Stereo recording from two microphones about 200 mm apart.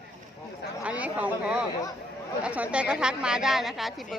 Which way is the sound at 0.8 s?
5° right (ahead or behind).